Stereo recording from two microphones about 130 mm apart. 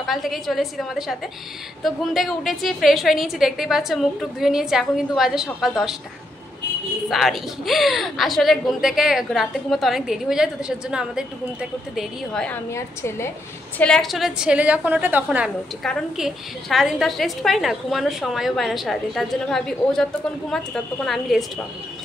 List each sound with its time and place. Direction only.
0.0 s a woman's voice: centre (ahead or behind)
7.1 s a woman's voice: centre (ahead or behind)
12.7 s a woman's voice: 20° left (ahead or behind)
13.7 s a woman's voice: 5° left (ahead or behind)